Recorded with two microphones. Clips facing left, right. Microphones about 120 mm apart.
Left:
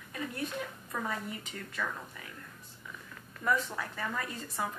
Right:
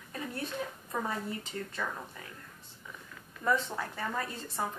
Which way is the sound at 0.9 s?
25° right (ahead or behind).